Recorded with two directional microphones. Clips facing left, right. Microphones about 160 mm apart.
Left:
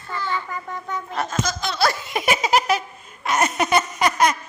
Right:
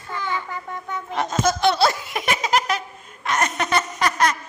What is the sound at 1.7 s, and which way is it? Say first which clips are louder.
Giggle: right 2 dB; 25° right (ahead or behind).